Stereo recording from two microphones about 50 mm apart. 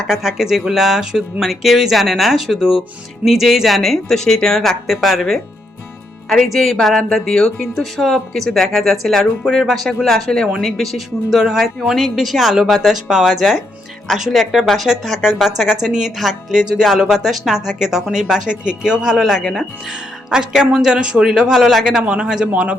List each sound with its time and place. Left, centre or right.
0.1 s speech: centre
6.2 s speech: centre
22.0 s speech: centre